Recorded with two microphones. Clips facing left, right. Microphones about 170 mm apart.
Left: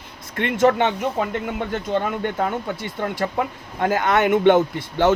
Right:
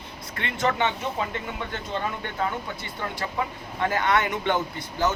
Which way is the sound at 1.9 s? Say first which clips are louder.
Left 9 dB; 60° left (ahead or behind).